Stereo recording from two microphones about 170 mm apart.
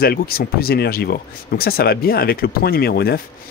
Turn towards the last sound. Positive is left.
turn(degrees=65)  # may be behind; listen again after turning